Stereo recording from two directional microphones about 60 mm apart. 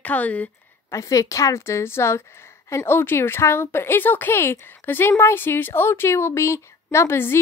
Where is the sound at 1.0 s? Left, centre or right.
Left.